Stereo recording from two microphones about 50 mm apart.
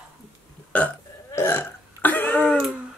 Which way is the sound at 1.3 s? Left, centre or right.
Left.